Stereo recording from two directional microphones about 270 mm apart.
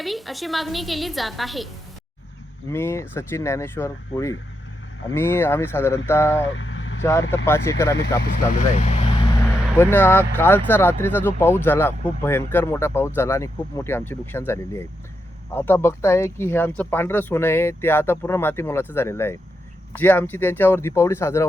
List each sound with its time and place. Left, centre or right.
0.0 s a woman's voice: centre
2.6 s speech: centre
6.5 s vehicle: left
7.0 s speech: centre
8.8 s vehicle: left
9.7 s speech: centre